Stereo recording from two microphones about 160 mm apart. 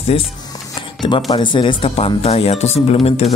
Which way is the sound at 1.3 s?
30° left (ahead or behind).